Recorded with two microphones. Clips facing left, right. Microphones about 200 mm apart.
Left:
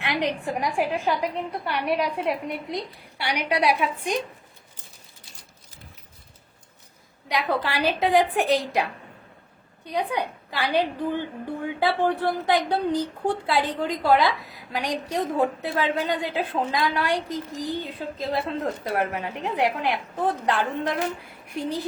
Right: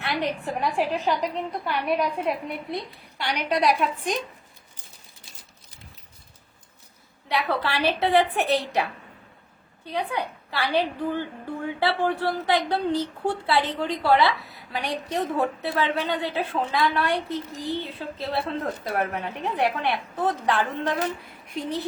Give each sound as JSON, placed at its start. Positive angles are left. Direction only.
{"t": 0.0, "sound": "speech", "side_deg": 15}
{"t": 7.3, "sound": "speech", "side_deg": 15}
{"t": 9.8, "sound": "speech", "side_deg": 15}